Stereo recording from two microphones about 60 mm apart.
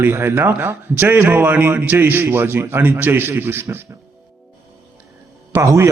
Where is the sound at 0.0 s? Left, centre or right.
Right.